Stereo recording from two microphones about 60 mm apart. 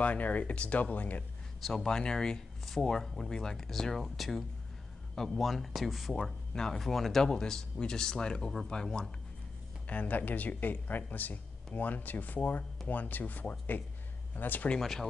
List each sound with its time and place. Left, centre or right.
0.0 s speech: left
1.6 s speech: centre
9.8 s speech: left
14.8 s speech: centre